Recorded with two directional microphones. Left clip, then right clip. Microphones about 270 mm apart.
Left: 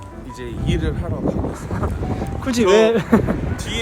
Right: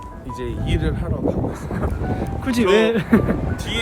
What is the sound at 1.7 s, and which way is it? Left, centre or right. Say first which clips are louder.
Speech: even; centre.